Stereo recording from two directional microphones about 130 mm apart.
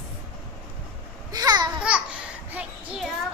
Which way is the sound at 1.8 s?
10° right (ahead or behind).